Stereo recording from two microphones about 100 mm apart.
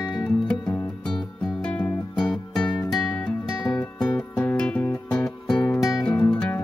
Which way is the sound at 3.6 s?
40° left (ahead or behind).